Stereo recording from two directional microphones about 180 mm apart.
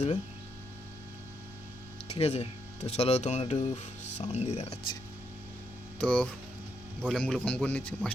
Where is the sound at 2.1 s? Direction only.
35° left (ahead or behind).